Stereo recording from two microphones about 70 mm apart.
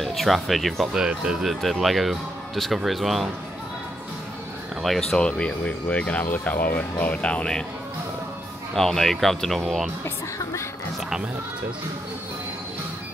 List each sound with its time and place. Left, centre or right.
0.0 s speech: centre
0.9 s speech: centre
4.8 s speech: centre
5.2 s speech: centre
8.7 s speech: centre